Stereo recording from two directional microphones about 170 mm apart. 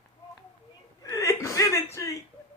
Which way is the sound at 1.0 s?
20° left (ahead or behind).